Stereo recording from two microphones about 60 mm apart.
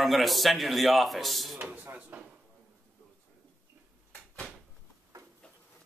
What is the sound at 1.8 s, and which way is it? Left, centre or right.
Drawer open or close, right.